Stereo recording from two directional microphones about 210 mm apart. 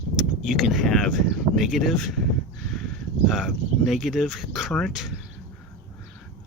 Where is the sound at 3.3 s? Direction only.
Centre (ahead or behind).